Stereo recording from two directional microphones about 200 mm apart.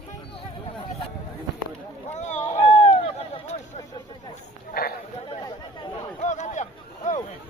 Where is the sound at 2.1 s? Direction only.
35° left (ahead or behind).